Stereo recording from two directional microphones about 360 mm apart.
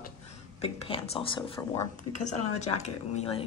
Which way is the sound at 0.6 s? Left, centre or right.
Centre.